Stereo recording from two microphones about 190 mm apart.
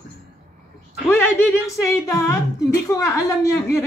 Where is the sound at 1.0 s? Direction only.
15° left (ahead or behind).